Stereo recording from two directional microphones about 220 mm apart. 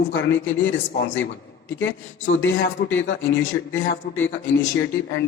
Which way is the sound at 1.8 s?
55° left (ahead or behind).